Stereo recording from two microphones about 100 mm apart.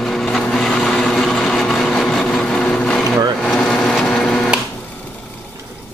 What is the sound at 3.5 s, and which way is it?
Wood, 5° left (ahead or behind).